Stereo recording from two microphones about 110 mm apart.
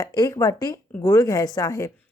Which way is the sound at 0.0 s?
30° left (ahead or behind).